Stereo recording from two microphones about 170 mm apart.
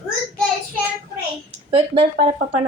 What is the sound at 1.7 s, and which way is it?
Speech, 35° right (ahead or behind).